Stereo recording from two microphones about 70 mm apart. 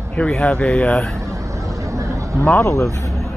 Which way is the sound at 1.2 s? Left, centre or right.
Right.